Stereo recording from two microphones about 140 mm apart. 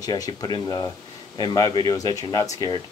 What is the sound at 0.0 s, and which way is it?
A man's voice, 25° left (ahead or behind).